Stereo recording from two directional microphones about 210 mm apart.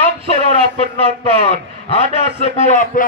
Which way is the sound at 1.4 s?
30° left (ahead or behind).